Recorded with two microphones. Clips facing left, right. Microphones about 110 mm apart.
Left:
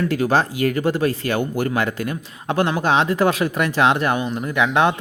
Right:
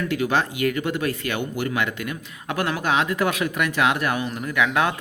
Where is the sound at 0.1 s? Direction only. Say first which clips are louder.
Left 4 dB; 40° left (ahead or behind).